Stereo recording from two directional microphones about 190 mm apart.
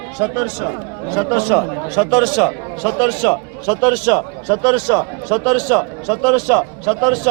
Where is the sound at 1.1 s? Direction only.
15° right (ahead or behind); by 3.3 s 5° left (ahead or behind).